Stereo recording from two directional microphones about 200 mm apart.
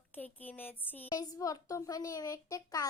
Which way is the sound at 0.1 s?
10° left (ahead or behind).